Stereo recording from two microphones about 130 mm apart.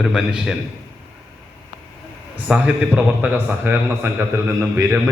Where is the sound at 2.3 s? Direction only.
10° right (ahead or behind).